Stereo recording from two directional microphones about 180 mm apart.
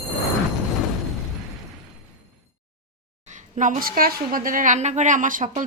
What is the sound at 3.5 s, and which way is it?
A woman's voice, 45° right (ahead or behind).